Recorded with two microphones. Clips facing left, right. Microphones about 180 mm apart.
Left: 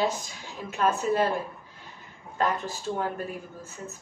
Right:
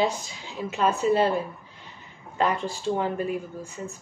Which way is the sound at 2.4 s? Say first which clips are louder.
Right 2 dB; 10° right (ahead or behind).